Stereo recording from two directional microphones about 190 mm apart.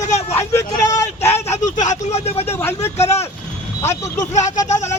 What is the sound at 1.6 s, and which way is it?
Vehicle, 40° left (ahead or behind).